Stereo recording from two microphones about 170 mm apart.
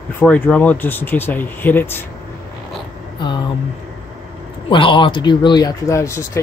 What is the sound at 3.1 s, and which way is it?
Vehicle, 25° left (ahead or behind).